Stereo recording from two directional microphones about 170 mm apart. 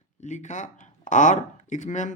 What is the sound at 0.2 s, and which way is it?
Speech, 45° left (ahead or behind).